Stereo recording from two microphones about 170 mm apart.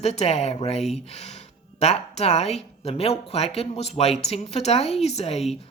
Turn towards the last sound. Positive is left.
turn(degrees=40)  # may be behind; listen again after turning